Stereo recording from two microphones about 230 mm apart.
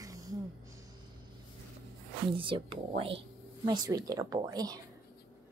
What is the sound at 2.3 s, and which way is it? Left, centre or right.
Speech, right.